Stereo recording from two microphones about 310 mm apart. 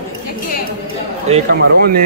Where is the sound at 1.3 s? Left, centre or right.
Right.